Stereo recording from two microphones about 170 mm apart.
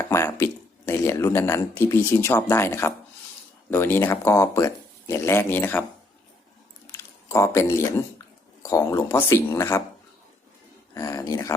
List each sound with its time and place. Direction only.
0.0 s speech: 15° left (ahead or behind)
6.9 s speech: 15° left (ahead or behind)
10.9 s speech: 20° left (ahead or behind)